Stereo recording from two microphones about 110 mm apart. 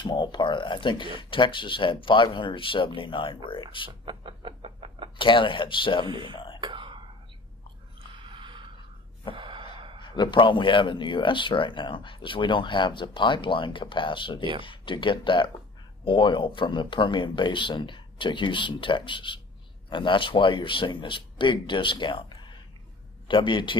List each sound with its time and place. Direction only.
0.0 s speech: 45° left (ahead or behind)
4.0 s a sound: 50° right (ahead or behind)
5.2 s speech: 50° left (ahead or behind)
6.0 s speech: 50° right (ahead or behind)
6.3 s throat clearing: 50° left (ahead or behind)
6.6 s whispering: 50° right (ahead or behind)
8.2 s a sound: 50° right (ahead or behind)
9.3 s gasp: 50° right (ahead or behind)
10.1 s speech: 45° left (ahead or behind)
23.2 s speech: 50° left (ahead or behind)